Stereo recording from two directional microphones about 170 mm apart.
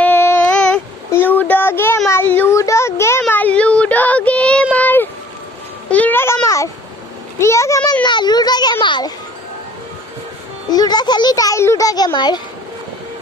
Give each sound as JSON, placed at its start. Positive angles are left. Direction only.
{"t": 0.0, "sound": "child singing", "side_deg": 15}
{"t": 2.0, "sound": "a sound", "side_deg": 15}
{"t": 8.8, "sound": "music", "side_deg": 25}
{"t": 10.7, "sound": "a child's voice", "side_deg": 25}